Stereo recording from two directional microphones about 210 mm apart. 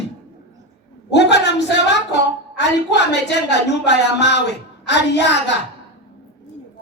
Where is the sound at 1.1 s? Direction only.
55° left (ahead or behind).